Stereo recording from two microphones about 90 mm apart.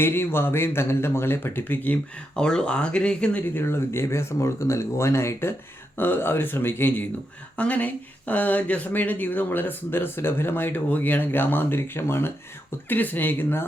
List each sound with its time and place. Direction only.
0.0 s speech: 25° left (ahead or behind)
2.3 s speech: 10° left (ahead or behind)
3.5 s speech: 25° left (ahead or behind)